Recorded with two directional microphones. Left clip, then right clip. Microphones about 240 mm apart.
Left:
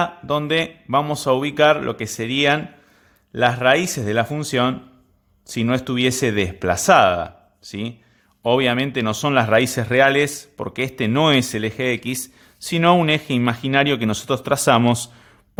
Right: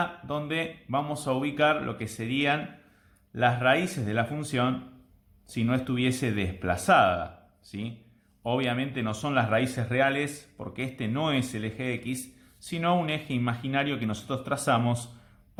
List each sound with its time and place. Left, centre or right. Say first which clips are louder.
0.0 s speech: left 10 dB; left